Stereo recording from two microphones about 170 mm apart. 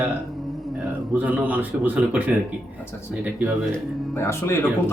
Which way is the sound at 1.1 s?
10° right (ahead or behind).